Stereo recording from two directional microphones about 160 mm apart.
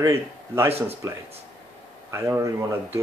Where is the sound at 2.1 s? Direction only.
20° right (ahead or behind).